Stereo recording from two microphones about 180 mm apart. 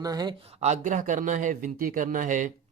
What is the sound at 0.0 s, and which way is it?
Speech, 20° right (ahead or behind).